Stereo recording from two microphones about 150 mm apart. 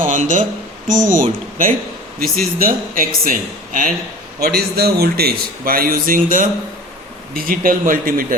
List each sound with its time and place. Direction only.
0.0 s speech: 60° right (ahead or behind)
2.1 s a man's voice: 75° right (ahead or behind)
4.4 s a man's voice: 90° right; by 8.4 s 70° right (ahead or behind)